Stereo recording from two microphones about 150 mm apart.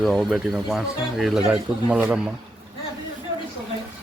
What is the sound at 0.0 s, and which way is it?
Speech, centre (ahead or behind).